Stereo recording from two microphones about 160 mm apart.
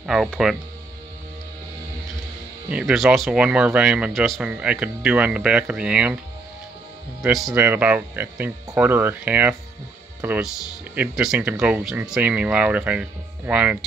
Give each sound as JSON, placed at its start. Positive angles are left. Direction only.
{"t": 0.0, "sound": "speech", "side_deg": 0}
{"t": 2.7, "sound": "speech", "side_deg": 0}
{"t": 7.2, "sound": "speech", "side_deg": 0}